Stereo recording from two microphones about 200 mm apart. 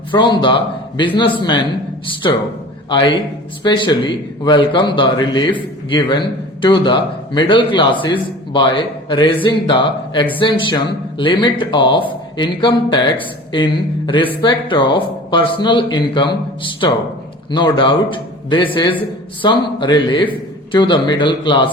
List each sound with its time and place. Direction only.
0.1 s speech: 25° left (ahead or behind)
14.4 s speech: 25° left (ahead or behind)
17.5 s speech: 25° left (ahead or behind)